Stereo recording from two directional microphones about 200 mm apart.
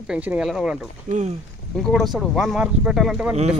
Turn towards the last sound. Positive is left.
turn(degrees=-5)  # may be behind; listen again after turning